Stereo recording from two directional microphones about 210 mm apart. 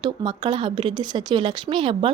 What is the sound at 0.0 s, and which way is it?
A woman's voice, 20° right (ahead or behind).